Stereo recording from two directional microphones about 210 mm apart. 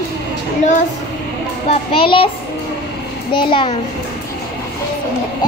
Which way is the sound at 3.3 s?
25° left (ahead or behind).